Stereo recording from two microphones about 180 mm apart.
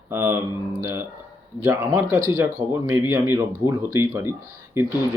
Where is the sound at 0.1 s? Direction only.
15° right (ahead or behind).